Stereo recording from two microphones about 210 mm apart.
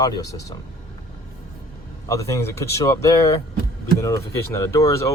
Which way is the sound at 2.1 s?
15° left (ahead or behind).